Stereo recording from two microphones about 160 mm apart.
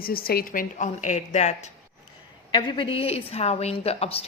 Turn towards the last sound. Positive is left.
turn(degrees=40)  # may be behind; listen again after turning